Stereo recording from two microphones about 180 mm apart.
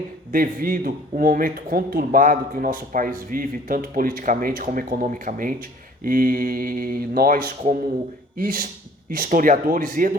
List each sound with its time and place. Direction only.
0.3 s speech: 50° right (ahead or behind)